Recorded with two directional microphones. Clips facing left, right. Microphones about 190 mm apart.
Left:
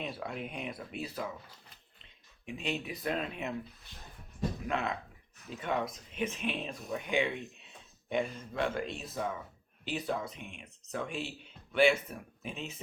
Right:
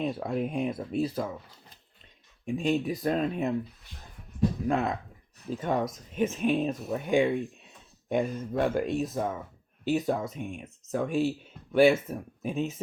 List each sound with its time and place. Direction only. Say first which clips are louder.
0.0 s speech: right 9 dB; 40° right (ahead or behind)
2.5 s speech: right 10 dB; 45° right (ahead or behind)
4.7 s speech: right 6 dB; 40° right (ahead or behind)